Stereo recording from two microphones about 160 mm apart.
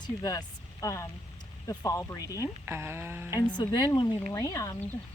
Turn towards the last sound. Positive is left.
turn(degrees=20)  # may be behind; listen again after turning